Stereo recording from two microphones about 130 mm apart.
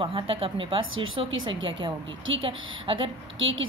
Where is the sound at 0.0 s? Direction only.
45° right (ahead or behind).